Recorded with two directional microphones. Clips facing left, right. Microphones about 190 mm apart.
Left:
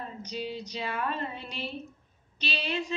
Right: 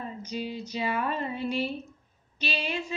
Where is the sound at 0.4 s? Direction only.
45° right (ahead or behind).